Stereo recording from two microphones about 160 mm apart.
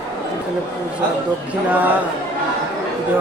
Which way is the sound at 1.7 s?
10° right (ahead or behind).